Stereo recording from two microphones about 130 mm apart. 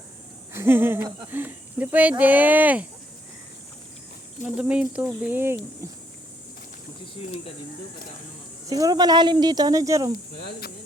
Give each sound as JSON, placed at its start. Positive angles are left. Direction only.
{"t": 0.5, "sound": "speech", "side_deg": -20}
{"t": 4.4, "sound": "speech", "side_deg": -10}
{"t": 7.0, "sound": "speech", "side_deg": 50}
{"t": 8.7, "sound": "speech", "side_deg": -30}